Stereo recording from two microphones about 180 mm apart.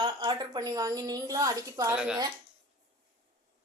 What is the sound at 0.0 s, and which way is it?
A woman's voice, 25° right (ahead or behind).